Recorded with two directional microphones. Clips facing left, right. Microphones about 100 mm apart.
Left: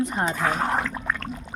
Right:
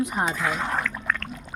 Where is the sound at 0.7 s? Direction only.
25° left (ahead or behind).